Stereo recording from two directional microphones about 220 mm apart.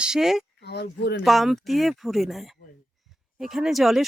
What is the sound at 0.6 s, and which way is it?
Speech, 50° left (ahead or behind).